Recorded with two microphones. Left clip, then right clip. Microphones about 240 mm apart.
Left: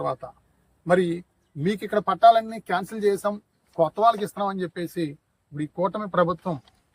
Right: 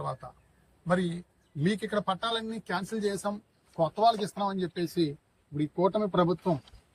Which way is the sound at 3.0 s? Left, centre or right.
Left.